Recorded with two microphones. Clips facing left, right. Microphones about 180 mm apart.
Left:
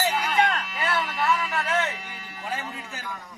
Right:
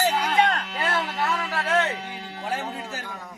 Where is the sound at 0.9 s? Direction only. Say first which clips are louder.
Left 1 dB; 35° right (ahead or behind).